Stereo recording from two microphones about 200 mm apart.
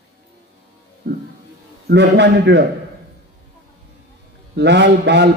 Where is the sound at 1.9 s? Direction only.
60° right (ahead or behind).